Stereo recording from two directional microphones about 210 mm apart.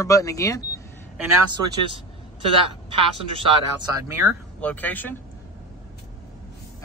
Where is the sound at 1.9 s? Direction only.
25° right (ahead or behind).